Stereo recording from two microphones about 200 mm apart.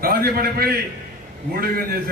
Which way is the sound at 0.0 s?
50° right (ahead or behind).